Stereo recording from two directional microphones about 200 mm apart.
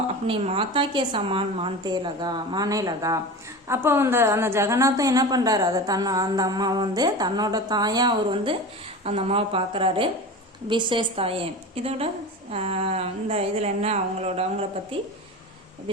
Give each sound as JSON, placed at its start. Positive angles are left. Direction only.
{"t": 0.3, "sound": "a woman's voice", "side_deg": -25}